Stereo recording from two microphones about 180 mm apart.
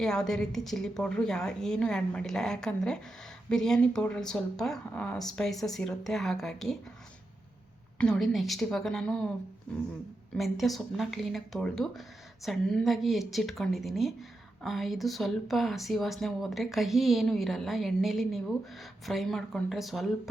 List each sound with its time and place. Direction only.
0.0 s speech: 5° left (ahead or behind)
7.9 s speech: 5° left (ahead or behind)
10.3 s speech: centre (ahead or behind)